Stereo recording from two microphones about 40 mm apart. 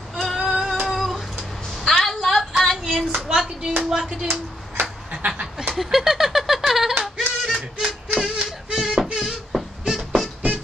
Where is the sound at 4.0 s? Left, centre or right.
Centre.